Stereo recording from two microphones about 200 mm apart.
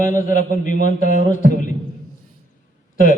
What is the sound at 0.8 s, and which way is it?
Speech, 55° right (ahead or behind).